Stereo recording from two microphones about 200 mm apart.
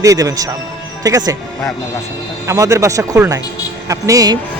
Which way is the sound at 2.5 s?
15° right (ahead or behind).